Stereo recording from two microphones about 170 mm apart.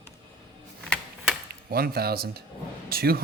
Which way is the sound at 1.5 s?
60° right (ahead or behind).